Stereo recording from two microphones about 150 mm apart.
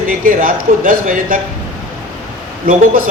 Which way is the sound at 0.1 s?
65° right (ahead or behind).